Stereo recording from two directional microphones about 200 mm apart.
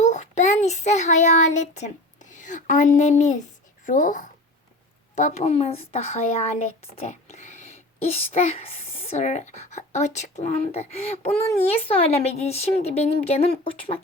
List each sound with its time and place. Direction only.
0.0 s a child's voice: 35° left (ahead or behind)